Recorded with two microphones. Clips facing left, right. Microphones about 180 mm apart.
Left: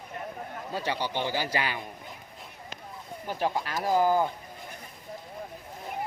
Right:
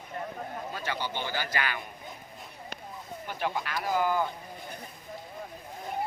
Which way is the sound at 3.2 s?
35° left (ahead or behind).